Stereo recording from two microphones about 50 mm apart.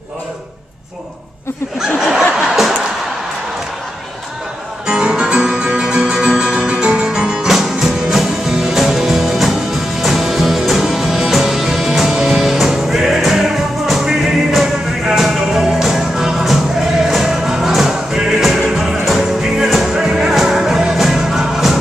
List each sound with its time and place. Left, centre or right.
2.0 s snicker: centre
2.5 s a sound: centre
4.8 s music: centre
7.4 s music: centre